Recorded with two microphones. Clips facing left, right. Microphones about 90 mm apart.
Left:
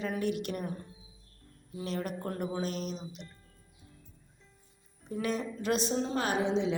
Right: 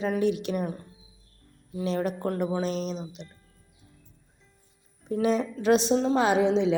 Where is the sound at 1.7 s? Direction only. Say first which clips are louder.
Right 7 dB; 90° right.